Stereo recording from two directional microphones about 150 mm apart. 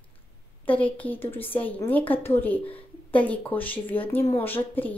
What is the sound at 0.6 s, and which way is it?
Speech, 10° left (ahead or behind).